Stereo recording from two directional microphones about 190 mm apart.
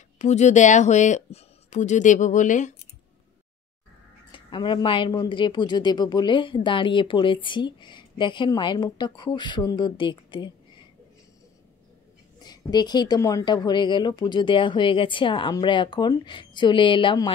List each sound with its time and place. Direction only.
0.2 s speech: 35° left (ahead or behind)
4.3 s a woman's voice: 25° left (ahead or behind)
12.4 s a woman's voice: 20° left (ahead or behind)